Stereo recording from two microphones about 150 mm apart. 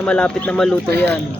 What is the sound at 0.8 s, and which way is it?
Speech, 90° right.